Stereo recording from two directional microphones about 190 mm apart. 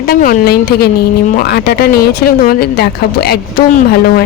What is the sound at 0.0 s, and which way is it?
A man's voice, 50° left (ahead or behind).